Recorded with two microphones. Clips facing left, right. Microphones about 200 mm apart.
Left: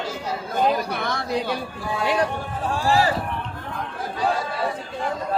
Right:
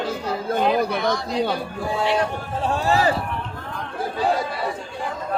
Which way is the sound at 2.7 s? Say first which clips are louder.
Right 1 dB; 25° right (ahead or behind).